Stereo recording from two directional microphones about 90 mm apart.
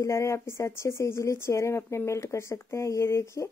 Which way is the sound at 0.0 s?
35° left (ahead or behind).